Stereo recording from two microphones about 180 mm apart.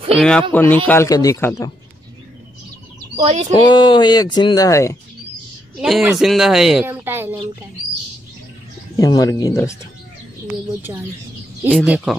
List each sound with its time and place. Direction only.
0.1 s speech: 5° left (ahead or behind)
3.2 s speech: 40° right (ahead or behind)
3.6 s speech: 25° left (ahead or behind)
5.8 s speech: centre (ahead or behind)
8.9 s speech: 20° left (ahead or behind)
10.9 s speech: 20° right (ahead or behind)
11.7 s speech: 5° right (ahead or behind)